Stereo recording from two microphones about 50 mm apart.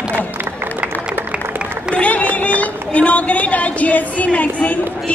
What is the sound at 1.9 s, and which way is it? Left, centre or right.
A woman's voice, left.